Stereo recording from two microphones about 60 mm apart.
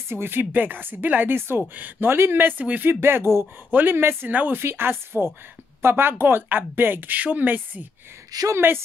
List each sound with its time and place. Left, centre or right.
0.1 s speech: right
1.7 s speech: right
8.3 s a woman's voice: right
8.5 s speech: right